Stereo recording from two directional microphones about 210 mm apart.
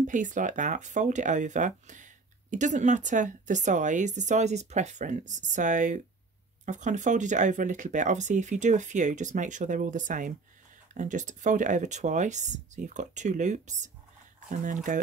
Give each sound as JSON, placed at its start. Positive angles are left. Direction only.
{"t": 0.0, "sound": "speech", "side_deg": -35}